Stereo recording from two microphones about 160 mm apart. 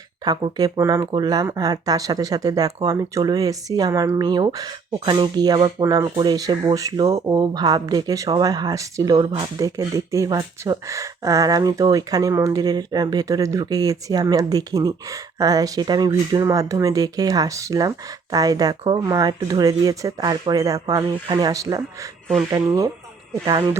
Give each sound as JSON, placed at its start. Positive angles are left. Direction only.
{"t": 0.3, "sound": "speech", "side_deg": -25}